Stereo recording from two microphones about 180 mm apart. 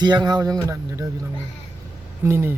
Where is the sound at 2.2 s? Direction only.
15° right (ahead or behind).